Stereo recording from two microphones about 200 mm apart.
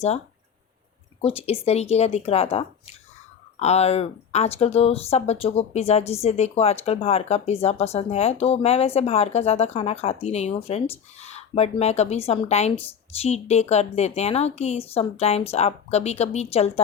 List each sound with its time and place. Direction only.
1.2 s speech: 30° left (ahead or behind)